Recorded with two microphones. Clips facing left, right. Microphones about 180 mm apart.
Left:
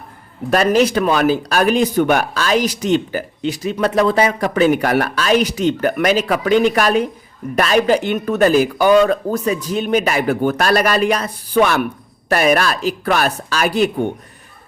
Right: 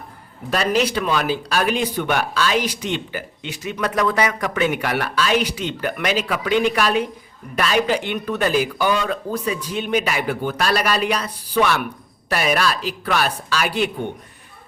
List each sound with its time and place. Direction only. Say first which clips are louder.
0.5 s speech: left 6 dB; 50° left (ahead or behind)